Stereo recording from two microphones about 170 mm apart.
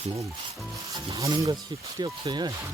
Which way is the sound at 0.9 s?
20° right (ahead or behind).